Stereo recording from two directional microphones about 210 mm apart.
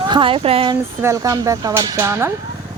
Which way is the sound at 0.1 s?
25° right (ahead or behind).